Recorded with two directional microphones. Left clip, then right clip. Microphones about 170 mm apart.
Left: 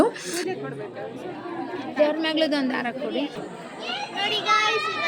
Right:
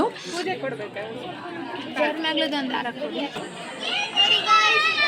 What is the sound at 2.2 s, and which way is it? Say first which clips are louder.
Speech: left 1 dB; 60° left (ahead or behind).